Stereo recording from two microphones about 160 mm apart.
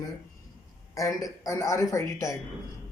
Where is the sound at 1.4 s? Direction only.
20° left (ahead or behind).